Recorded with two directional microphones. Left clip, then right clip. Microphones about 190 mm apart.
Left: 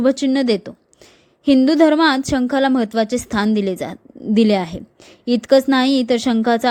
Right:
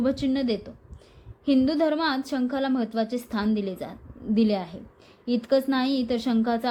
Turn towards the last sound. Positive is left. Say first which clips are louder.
# left 9 dB
turn(degrees=35)  # may be behind; listen again after turning